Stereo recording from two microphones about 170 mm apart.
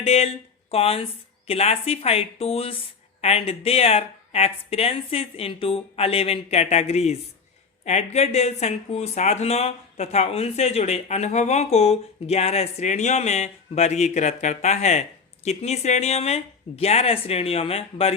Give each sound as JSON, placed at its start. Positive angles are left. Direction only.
{"t": 0.0, "sound": "speech", "side_deg": 35}